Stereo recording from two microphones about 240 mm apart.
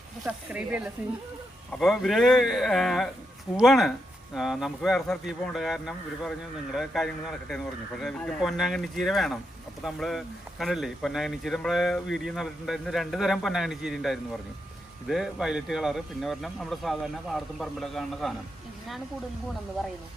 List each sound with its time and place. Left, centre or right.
0.3 s speech: centre